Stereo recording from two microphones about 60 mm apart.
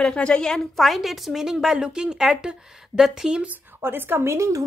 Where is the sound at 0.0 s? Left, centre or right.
Centre.